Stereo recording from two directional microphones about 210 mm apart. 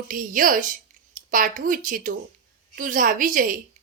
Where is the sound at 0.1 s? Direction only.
40° right (ahead or behind).